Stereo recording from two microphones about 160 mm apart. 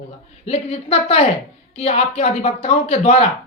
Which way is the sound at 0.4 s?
40° left (ahead or behind).